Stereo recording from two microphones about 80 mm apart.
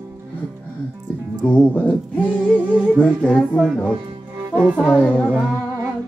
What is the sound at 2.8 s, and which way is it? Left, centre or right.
Music, centre.